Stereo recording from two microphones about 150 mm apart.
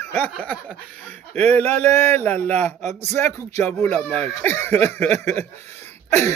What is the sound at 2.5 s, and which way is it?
Speech, 50° right (ahead or behind).